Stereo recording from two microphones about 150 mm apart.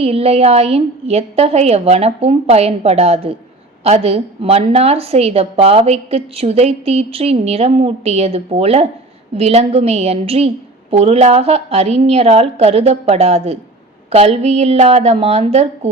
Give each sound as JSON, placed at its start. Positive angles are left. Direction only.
{"t": 0.0, "sound": "a woman's voice", "side_deg": -40}